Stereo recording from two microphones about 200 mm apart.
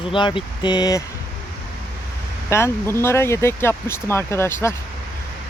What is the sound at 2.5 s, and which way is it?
Speech, 10° left (ahead or behind).